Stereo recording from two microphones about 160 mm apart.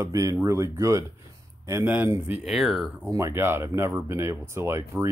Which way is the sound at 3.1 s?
15° right (ahead or behind).